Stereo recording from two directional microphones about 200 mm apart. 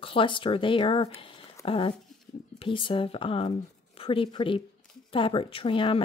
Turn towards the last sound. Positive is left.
turn(degrees=25)  # may be behind; listen again after turning